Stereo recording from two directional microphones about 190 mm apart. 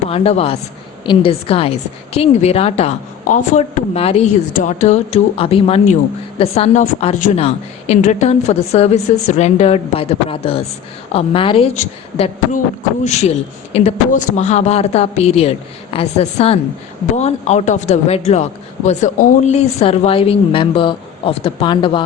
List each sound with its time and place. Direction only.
0.1 s a woman's voice: 30° left (ahead or behind)